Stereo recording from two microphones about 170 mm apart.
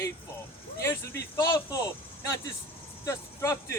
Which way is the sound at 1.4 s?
20° left (ahead or behind).